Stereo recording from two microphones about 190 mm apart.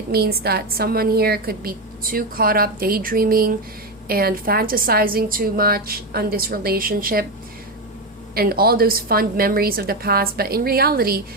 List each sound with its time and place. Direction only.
0.1 s a woman's voice: 55° right (ahead or behind)
8.4 s a woman's voice: 50° right (ahead or behind)